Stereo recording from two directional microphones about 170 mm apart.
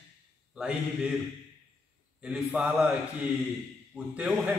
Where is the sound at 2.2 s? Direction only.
5° right (ahead or behind).